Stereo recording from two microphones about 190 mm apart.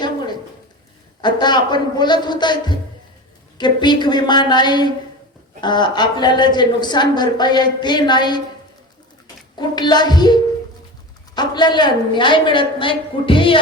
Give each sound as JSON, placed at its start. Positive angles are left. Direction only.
{"t": 1.2, "sound": "a woman's voice", "side_deg": 25}
{"t": 9.6, "sound": "a woman's voice", "side_deg": 25}